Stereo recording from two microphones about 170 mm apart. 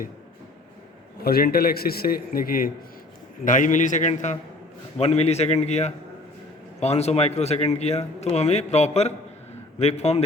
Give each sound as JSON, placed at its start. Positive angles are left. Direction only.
{"t": 1.2, "sound": "a man's voice", "side_deg": 65}